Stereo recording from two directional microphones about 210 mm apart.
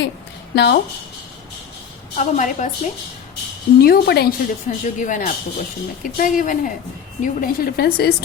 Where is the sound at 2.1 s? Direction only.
35° left (ahead or behind).